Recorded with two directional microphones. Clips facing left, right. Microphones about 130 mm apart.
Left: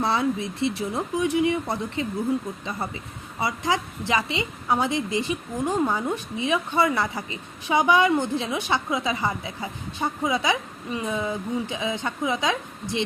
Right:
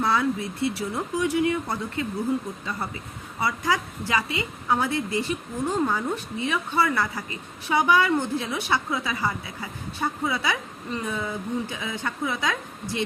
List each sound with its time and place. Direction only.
0.0 s a woman's voice: 25° left (ahead or behind)
3.4 s a woman's voice: 25° left (ahead or behind)